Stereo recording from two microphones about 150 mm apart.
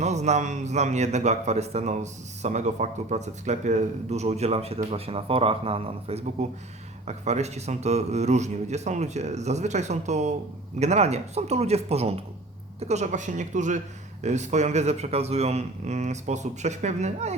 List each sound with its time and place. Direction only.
0.0 s a man's voice: 50° right (ahead or behind)